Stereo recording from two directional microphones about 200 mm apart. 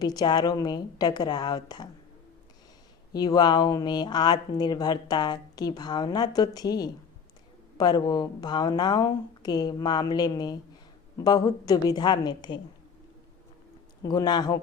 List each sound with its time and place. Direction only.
0.0 s speech: 20° left (ahead or behind)
3.1 s speech: 20° left (ahead or behind)
14.0 s speech: 20° left (ahead or behind)